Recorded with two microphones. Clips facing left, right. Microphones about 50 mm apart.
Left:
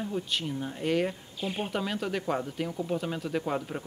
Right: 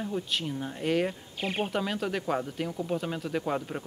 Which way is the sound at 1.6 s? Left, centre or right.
Centre.